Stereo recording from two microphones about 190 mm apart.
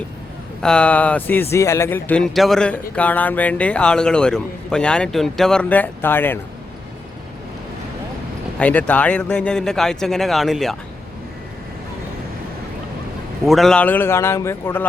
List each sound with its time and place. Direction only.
0.6 s a man's voice: 5° left (ahead or behind)
8.5 s a man's voice: 5° left (ahead or behind)
13.4 s speech: centre (ahead or behind)